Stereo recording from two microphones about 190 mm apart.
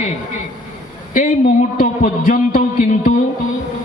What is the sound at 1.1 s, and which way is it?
A man's voice, 45° left (ahead or behind).